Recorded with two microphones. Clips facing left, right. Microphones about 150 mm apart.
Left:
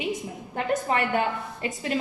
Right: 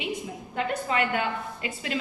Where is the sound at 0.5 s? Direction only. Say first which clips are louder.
Left 2 dB; 45° left (ahead or behind).